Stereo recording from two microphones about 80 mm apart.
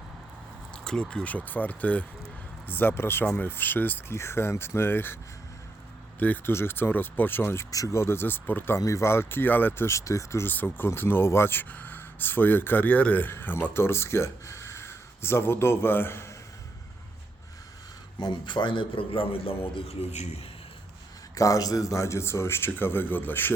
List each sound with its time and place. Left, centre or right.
0.7 s a sound: centre
1.1 s speech: centre
6.1 s speech: left
7.7 s speech: left
8.8 s speech: left
10.4 s speech: left
18.2 s a man's voice: left
21.3 s speech: left